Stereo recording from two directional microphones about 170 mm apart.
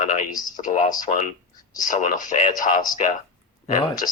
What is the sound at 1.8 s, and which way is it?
Speech, 50° left (ahead or behind).